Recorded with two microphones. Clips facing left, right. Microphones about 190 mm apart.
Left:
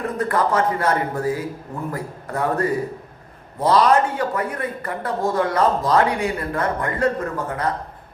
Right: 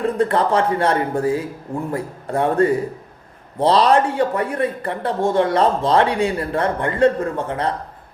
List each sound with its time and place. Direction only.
0.0 s speech: 30° right (ahead or behind)